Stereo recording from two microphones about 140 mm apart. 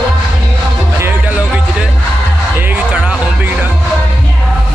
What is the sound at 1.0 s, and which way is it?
Music, 15° right (ahead or behind).